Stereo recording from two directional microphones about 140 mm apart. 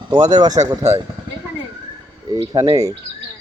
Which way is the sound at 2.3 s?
30° right (ahead or behind).